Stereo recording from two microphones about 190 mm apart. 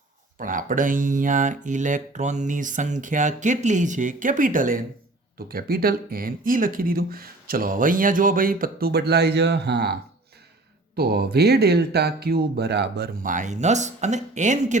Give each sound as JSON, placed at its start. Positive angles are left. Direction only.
{"t": 0.3, "sound": "speech", "side_deg": -45}